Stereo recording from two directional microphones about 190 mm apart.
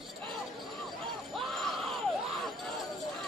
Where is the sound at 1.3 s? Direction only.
Centre (ahead or behind).